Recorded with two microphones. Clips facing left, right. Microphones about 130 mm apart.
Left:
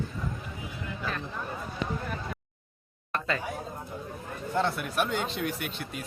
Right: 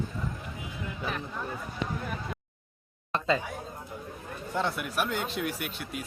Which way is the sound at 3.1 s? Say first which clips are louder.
Right 3 dB; 20° right (ahead or behind).